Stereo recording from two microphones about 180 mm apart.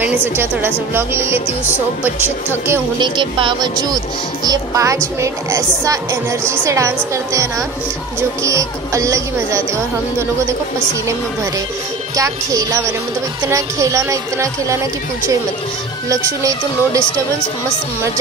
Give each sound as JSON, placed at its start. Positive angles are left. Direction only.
{"t": 0.0, "sound": "a woman's voice", "side_deg": -10}
{"t": 2.2, "sound": "a woman's voice", "side_deg": -15}
{"t": 3.0, "sound": "a woman's voice", "side_deg": -25}
{"t": 8.5, "sound": "a woman's voice", "side_deg": -15}
{"t": 12.2, "sound": "a woman's voice", "side_deg": -20}
{"t": 16.1, "sound": "a woman's voice", "side_deg": -20}